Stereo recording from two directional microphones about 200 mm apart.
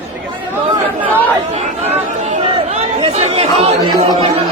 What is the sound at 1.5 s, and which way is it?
Chatter, 35° right (ahead or behind).